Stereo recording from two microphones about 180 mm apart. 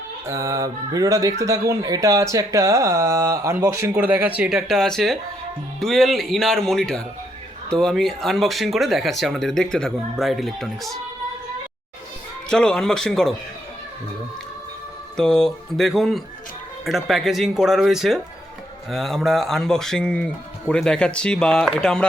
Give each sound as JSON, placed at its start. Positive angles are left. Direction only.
{"t": 0.3, "sound": "speech", "side_deg": -15}
{"t": 12.5, "sound": "speech", "side_deg": 5}
{"t": 15.1, "sound": "speech", "side_deg": 5}